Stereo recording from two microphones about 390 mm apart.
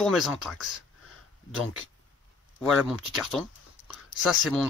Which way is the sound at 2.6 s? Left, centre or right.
Centre.